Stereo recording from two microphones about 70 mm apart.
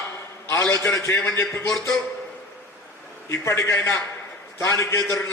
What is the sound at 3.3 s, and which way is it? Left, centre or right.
A man's voice, left.